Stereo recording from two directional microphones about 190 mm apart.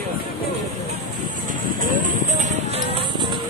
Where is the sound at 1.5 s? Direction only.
45° right (ahead or behind); by 3.3 s 25° right (ahead or behind).